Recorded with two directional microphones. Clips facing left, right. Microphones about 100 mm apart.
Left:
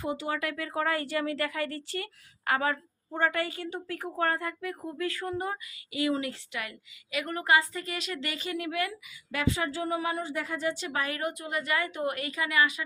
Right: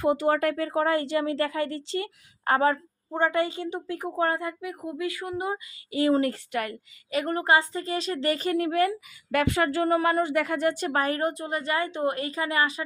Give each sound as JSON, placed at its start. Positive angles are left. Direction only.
{"t": 0.0, "sound": "a woman's voice", "side_deg": -55}
{"t": 2.4, "sound": "a woman's voice", "side_deg": -35}
{"t": 3.1, "sound": "a woman's voice", "side_deg": -25}
{"t": 5.9, "sound": "speech", "side_deg": -35}
{"t": 9.3, "sound": "speech", "side_deg": -55}